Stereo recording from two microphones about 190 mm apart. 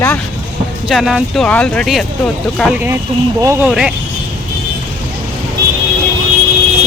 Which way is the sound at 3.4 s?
10° right (ahead or behind).